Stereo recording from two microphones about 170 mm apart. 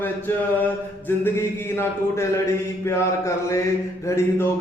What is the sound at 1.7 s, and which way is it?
A man's voice, 15° left (ahead or behind).